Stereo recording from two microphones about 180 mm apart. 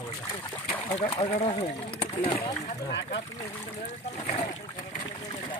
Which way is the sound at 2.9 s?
70° left (ahead or behind).